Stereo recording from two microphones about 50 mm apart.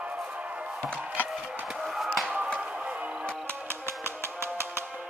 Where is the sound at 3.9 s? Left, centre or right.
Right.